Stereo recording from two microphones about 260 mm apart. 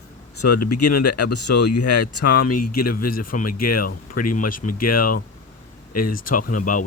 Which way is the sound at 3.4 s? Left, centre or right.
Left.